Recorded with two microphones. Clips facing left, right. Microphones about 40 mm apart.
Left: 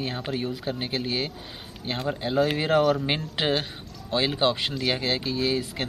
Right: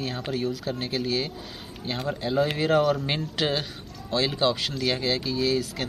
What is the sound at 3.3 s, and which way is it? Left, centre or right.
Speech, left.